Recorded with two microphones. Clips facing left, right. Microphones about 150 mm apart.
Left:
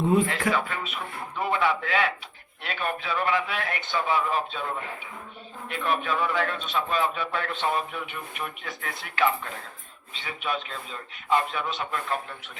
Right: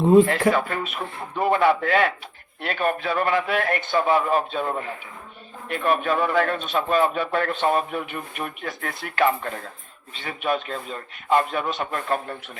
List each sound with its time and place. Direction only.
0.3 s a man's voice: 45° right (ahead or behind)
5.6 s a man's voice: 50° right (ahead or behind)